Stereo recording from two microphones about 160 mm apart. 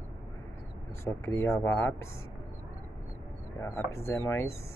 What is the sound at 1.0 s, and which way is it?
Speech, 15° left (ahead or behind).